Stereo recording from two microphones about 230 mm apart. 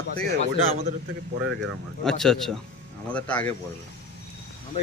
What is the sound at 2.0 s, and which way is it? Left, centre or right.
Speech, centre.